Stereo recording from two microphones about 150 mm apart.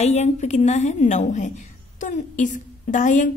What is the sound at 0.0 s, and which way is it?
A woman's voice, 50° left (ahead or behind).